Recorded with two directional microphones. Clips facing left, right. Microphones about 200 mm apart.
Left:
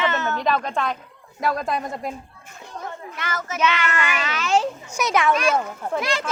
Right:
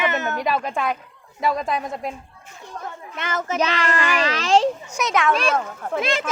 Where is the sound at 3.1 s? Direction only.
25° right (ahead or behind).